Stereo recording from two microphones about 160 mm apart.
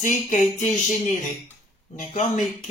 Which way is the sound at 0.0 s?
55° left (ahead or behind).